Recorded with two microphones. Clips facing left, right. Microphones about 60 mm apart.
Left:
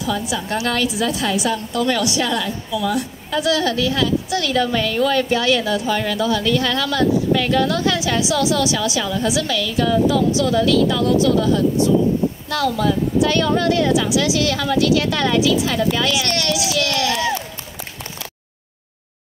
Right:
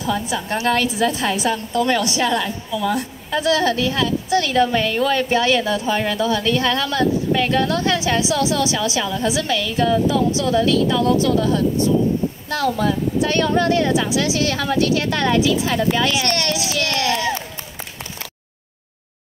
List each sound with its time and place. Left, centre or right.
0.0 s a woman's voice: right